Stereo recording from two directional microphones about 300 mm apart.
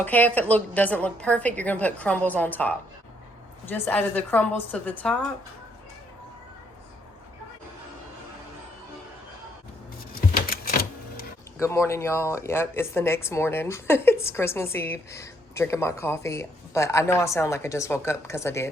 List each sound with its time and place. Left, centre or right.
0.0 s a woman's voice: centre
10.5 s a sound: left
11.6 s speech: centre